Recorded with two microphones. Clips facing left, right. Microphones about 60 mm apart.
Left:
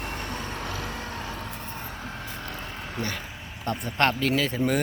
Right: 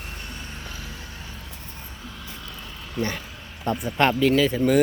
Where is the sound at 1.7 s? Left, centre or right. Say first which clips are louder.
Left 4 dB; left.